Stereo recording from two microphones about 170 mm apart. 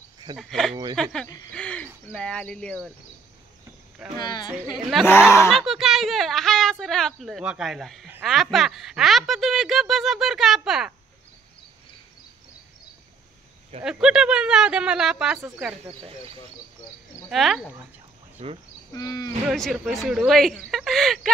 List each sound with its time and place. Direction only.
0.4 s speech: centre (ahead or behind)
4.2 s wild animals: 25° left (ahead or behind)
4.6 s speech: centre (ahead or behind)
13.8 s speech: 5° right (ahead or behind)
17.3 s speech: centre (ahead or behind)
18.4 s speech: 35° right (ahead or behind)
18.9 s wild animals: 20° left (ahead or behind)
19.4 s speech: centre (ahead or behind)